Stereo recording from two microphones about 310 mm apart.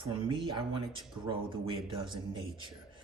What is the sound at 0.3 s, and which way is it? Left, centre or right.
Speech, centre.